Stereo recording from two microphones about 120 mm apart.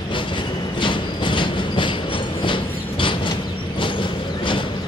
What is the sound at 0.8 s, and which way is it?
Train, 40° left (ahead or behind).